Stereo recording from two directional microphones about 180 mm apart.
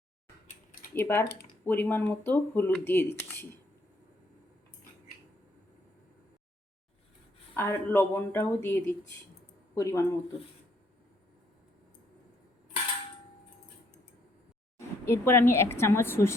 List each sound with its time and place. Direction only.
0.9 s speech: 10° left (ahead or behind)
7.5 s speech: 15° left (ahead or behind)
14.8 s a woman's voice: 15° left (ahead or behind)